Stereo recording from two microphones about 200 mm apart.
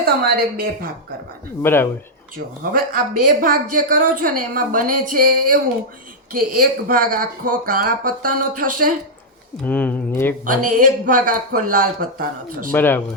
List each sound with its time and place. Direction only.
0.0 s a woman's voice: 50° right (ahead or behind)
1.6 s speech: 10° left (ahead or behind)
2.3 s a woman's voice: 45° right (ahead or behind)
9.6 s speech: 10° left (ahead or behind)
10.4 s a woman's voice: 40° right (ahead or behind)
12.7 s speech: 10° left (ahead or behind)